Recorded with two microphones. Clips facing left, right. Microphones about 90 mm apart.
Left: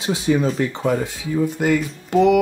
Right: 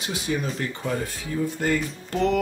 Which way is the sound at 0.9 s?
15° left (ahead or behind).